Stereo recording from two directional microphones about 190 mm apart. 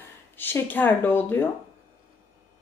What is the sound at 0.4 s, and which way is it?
A woman's voice, 10° left (ahead or behind).